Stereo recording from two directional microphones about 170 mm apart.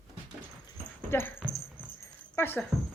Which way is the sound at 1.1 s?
15° left (ahead or behind).